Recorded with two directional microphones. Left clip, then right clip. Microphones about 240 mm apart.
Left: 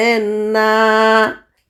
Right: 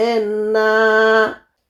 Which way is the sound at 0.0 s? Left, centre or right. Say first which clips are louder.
Left 2 dB; left.